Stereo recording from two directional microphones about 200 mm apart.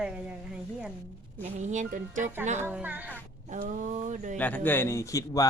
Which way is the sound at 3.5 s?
40° right (ahead or behind).